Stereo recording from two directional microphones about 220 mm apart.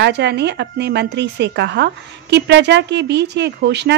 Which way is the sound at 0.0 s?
50° right (ahead or behind).